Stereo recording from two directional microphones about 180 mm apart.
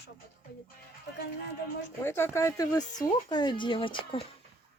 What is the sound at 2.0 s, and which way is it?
Speech, 15° left (ahead or behind).